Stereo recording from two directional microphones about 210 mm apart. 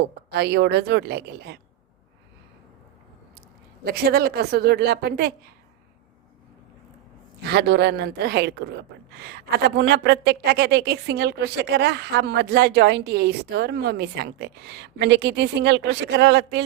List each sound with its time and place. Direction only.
0.3 s a woman's voice: 55° right (ahead or behind)
3.8 s a woman's voice: 45° right (ahead or behind)
7.4 s a woman's voice: 55° right (ahead or behind)